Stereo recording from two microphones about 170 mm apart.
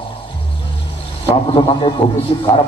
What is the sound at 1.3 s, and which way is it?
Speech, 30° left (ahead or behind).